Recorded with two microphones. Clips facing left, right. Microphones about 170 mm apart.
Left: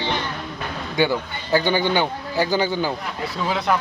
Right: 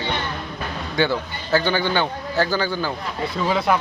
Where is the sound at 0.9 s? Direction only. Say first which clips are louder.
Left 1 dB; 15° left (ahead or behind).